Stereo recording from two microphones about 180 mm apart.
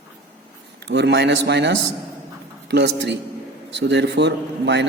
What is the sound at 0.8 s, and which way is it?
A man's voice, 70° right (ahead or behind).